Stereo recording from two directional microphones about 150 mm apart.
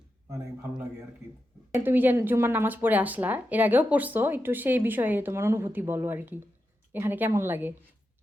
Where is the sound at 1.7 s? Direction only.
15° right (ahead or behind).